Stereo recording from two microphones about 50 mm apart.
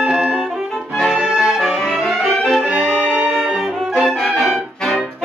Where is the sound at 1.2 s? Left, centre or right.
Centre.